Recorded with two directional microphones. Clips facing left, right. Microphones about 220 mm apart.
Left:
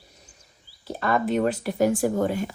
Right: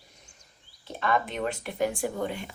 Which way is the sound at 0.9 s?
40° left (ahead or behind).